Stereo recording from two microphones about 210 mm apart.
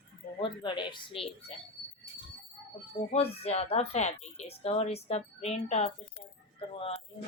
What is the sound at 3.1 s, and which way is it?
Speech, 30° left (ahead or behind).